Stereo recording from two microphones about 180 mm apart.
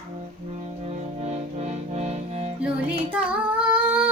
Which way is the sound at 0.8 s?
35° right (ahead or behind).